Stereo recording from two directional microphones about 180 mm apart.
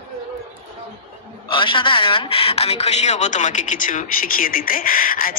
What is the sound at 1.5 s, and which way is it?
A man's voice, 30° left (ahead or behind).